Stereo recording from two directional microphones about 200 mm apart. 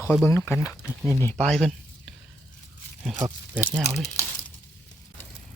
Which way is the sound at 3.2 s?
10° right (ahead or behind).